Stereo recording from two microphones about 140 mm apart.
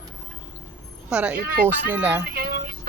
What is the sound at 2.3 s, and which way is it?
Music, 90° right.